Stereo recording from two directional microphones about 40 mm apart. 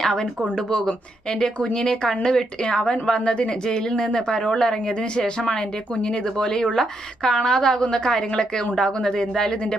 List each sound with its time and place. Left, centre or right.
0.0 s a woman's voice: centre